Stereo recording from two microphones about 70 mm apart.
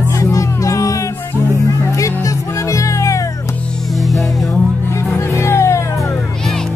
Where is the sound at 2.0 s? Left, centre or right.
Left.